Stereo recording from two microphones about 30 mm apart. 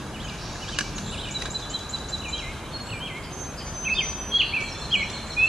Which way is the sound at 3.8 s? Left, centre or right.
Centre.